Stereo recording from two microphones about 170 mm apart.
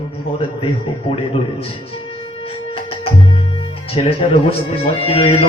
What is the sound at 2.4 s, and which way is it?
Music, 35° left (ahead or behind).